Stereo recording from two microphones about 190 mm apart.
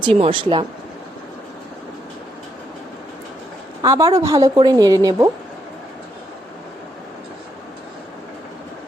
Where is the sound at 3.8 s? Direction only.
15° right (ahead or behind).